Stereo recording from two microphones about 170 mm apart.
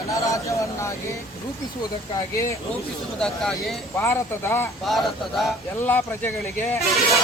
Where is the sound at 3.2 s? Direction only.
5° left (ahead or behind).